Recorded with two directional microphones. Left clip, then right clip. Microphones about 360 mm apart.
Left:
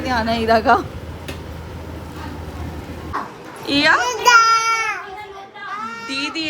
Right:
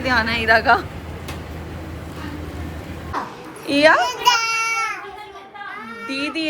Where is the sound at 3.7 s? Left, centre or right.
Centre.